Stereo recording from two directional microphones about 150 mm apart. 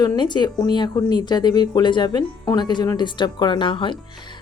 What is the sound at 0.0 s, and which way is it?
A woman's voice, 30° left (ahead or behind).